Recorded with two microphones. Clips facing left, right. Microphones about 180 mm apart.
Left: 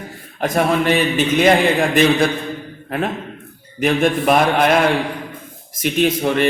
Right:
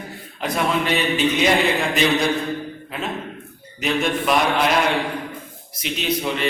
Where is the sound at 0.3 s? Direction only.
50° left (ahead or behind).